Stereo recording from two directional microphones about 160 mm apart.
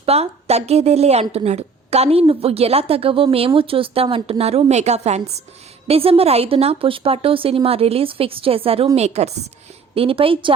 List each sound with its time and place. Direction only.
0.0 s a woman's voice: 40° right (ahead or behind)